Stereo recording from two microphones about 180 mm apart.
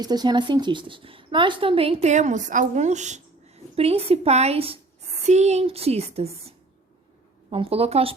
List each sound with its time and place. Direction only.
0.0 s a woman's voice: 20° right (ahead or behind)
7.5 s a woman's voice: 30° right (ahead or behind)